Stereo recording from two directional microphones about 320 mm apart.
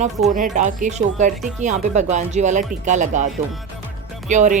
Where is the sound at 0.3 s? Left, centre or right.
Right.